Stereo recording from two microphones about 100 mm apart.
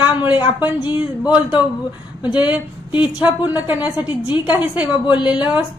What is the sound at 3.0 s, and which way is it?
A woman's voice, 15° right (ahead or behind).